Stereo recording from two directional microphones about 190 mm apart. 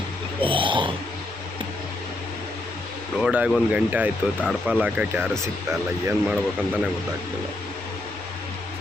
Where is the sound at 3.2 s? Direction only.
5° right (ahead or behind).